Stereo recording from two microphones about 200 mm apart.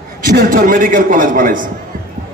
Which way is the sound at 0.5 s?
45° right (ahead or behind).